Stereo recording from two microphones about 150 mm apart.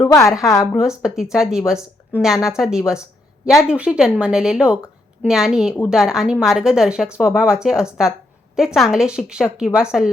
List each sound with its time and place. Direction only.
0.1 s a woman's voice: 20° left (ahead or behind)
0.6 s a woman's voice: 5° right (ahead or behind)